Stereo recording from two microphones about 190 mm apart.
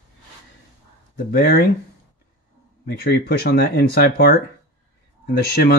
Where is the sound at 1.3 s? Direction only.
55° left (ahead or behind).